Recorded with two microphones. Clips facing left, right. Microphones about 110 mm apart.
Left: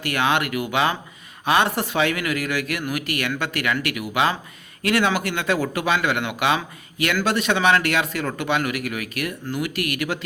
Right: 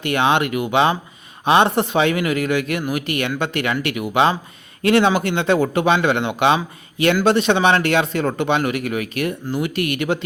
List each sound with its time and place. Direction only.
0.0 s speech: 25° right (ahead or behind)